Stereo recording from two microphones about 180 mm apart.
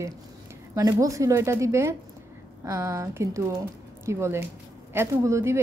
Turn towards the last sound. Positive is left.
turn(degrees=-15)  # may be behind; listen again after turning